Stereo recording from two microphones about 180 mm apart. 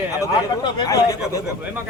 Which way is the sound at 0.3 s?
25° left (ahead or behind).